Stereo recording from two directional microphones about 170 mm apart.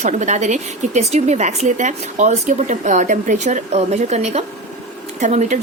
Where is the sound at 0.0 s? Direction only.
45° right (ahead or behind).